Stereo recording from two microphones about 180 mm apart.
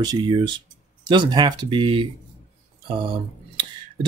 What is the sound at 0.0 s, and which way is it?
Speech, 25° right (ahead or behind).